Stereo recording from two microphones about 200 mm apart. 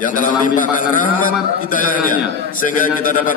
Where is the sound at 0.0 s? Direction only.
40° left (ahead or behind).